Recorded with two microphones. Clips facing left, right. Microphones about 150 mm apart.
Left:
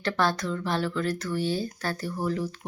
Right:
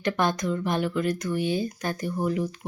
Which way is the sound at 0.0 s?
15° right (ahead or behind).